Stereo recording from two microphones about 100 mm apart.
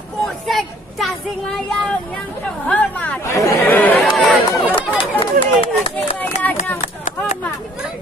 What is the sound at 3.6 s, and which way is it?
Speech, 20° left (ahead or behind).